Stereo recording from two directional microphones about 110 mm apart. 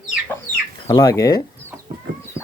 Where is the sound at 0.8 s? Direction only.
30° left (ahead or behind).